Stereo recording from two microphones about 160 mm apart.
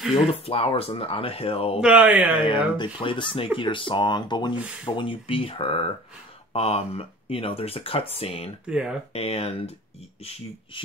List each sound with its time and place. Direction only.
0.1 s speech: 35° left (ahead or behind)
1.8 s speech: 10° right (ahead or behind)
2.4 s speech: 30° left (ahead or behind)
8.6 s speech: 5° right (ahead or behind)
9.1 s speech: 40° left (ahead or behind)